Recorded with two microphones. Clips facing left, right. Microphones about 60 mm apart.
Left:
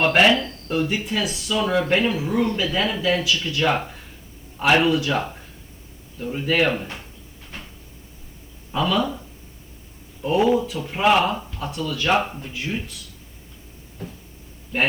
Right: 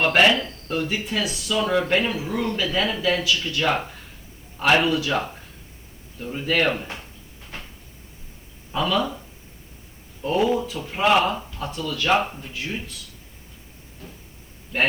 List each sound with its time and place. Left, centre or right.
0.0 s speech: centre
8.7 s speech: centre
10.2 s speech: centre
10.6 s speech: centre